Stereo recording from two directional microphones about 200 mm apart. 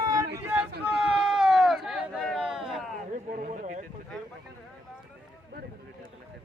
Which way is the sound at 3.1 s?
40° right (ahead or behind).